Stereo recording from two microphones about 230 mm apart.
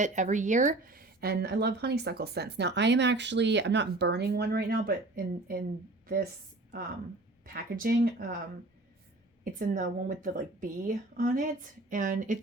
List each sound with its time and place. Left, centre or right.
0.0 s speech: right
7.4 s speech: right
9.4 s speech: right